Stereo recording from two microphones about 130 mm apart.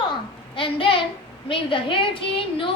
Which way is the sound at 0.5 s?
40° left (ahead or behind).